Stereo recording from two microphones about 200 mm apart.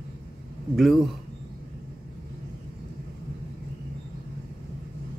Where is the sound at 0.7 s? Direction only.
Centre (ahead or behind).